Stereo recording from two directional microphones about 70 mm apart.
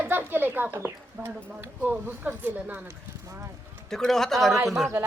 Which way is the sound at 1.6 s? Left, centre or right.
Right.